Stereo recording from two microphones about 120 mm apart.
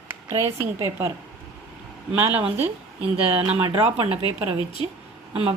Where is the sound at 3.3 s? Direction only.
50° right (ahead or behind).